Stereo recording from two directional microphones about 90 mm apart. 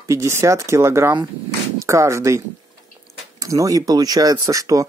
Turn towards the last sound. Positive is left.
turn(degrees=-40)  # may be behind; listen again after turning